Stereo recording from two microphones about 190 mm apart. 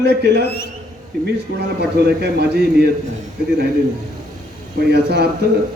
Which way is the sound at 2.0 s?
55° right (ahead or behind).